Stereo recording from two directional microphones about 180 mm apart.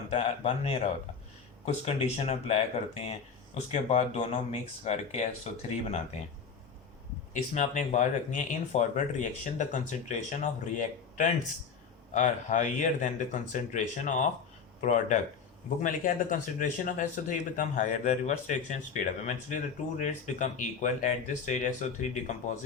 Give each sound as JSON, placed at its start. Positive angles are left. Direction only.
{"t": 0.1, "sound": "speech", "side_deg": 35}
{"t": 7.5, "sound": "speech", "side_deg": 40}